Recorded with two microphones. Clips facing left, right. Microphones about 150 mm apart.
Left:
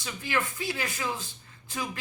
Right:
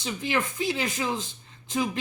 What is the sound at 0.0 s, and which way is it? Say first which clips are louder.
Speech: right 3 dB; 20° right (ahead or behind).